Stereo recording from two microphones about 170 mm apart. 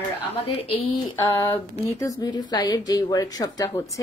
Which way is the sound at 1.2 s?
20° left (ahead or behind).